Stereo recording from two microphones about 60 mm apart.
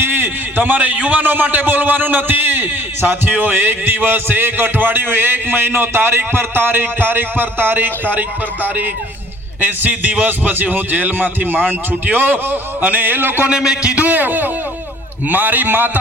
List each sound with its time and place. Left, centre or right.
0.0 s a man's voice: right
13.5 s a man's voice: centre; by 15.9 s right